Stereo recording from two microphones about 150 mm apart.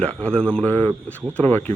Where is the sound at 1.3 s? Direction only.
10° left (ahead or behind).